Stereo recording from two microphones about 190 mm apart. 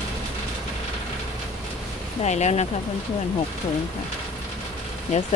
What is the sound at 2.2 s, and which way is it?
Speech, 35° left (ahead or behind).